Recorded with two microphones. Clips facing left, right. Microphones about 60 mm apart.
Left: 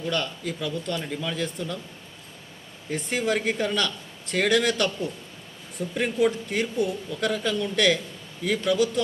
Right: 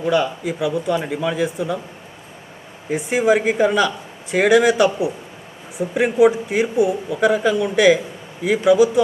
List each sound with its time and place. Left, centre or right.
0.1 s a man's voice: centre
2.9 s a man's voice: centre
5.8 s speech: right
6.1 s a man's voice: centre